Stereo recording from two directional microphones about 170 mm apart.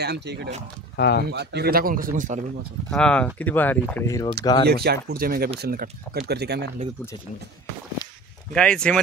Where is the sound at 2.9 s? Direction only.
5° left (ahead or behind).